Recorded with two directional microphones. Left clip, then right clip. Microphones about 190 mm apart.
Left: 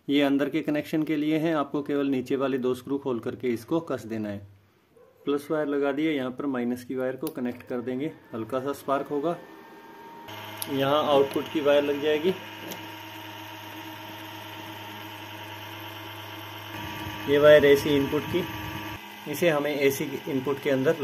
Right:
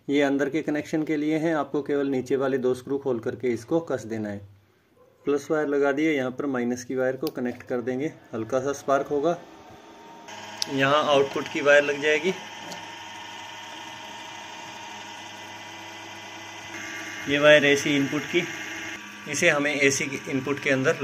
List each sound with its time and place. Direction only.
0.1 s speech: centre (ahead or behind)
10.8 s speech: 10° left (ahead or behind)
17.3 s speech: 25° left (ahead or behind)
19.2 s speech: 20° left (ahead or behind)